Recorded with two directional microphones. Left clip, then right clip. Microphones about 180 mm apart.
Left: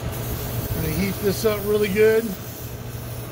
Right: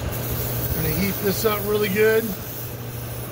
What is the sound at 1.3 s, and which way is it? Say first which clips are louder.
Speech: left 1 dB; 45° left (ahead or behind).